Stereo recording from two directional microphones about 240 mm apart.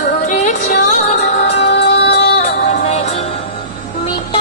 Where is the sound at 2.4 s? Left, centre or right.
Left.